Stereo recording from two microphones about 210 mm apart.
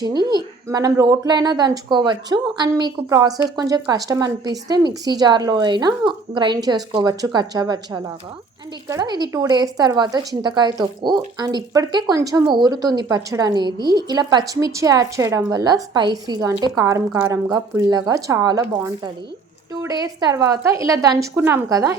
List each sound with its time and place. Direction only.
0.0 s a woman's voice: 20° right (ahead or behind)